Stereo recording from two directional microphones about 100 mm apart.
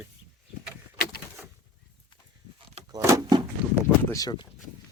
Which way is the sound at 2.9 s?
30° right (ahead or behind).